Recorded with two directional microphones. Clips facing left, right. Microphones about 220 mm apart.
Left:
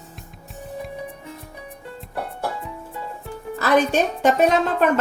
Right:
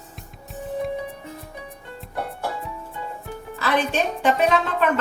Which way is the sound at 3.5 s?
45° left (ahead or behind).